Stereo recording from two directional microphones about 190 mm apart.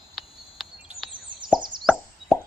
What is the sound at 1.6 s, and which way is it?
Plop, 25° right (ahead or behind).